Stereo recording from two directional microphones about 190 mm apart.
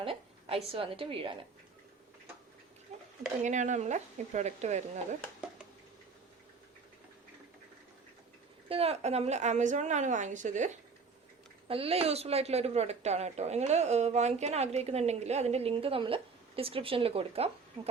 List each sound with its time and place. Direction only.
0.0 s a woman's voice: 30° right (ahead or behind)
2.9 s a sound: 35° right (ahead or behind)
3.4 s a woman's voice: 40° right (ahead or behind)
8.7 s a woman's voice: 30° right (ahead or behind)
11.7 s a woman's voice: 30° right (ahead or behind)